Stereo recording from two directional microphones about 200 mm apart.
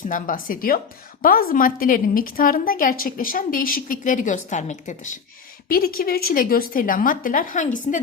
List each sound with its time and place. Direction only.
0.1 s a woman's voice: 45° left (ahead or behind)